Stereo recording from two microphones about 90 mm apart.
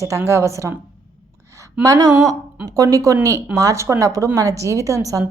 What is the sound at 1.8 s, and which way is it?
A woman's voice, 45° right (ahead or behind).